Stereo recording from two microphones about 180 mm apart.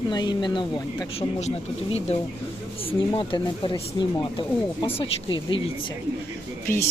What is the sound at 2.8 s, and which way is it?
Speech, 25° left (ahead or behind).